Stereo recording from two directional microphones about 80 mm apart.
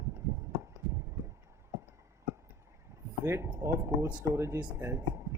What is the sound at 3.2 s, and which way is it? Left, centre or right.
Speech, right.